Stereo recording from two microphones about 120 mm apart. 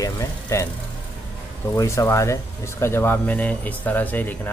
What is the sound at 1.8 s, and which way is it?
Speech, 25° left (ahead or behind).